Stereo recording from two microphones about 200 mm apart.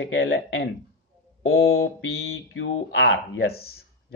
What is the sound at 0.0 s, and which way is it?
Speech, 65° left (ahead or behind).